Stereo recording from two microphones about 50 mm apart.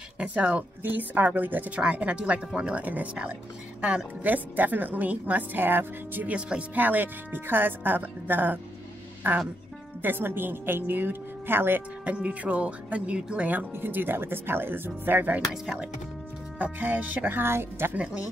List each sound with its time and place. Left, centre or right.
0.2 s speech: right
0.8 s a woman's voice: right
1.9 s a woman's voice: right
12.0 s speech: right
13.7 s a woman's voice: right
15.5 s speech: centre
16.5 s a woman's voice: right
17.4 s a woman's voice: right
17.9 s speech: right